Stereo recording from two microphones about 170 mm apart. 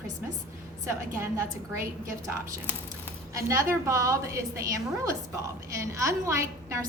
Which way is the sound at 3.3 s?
15° right (ahead or behind).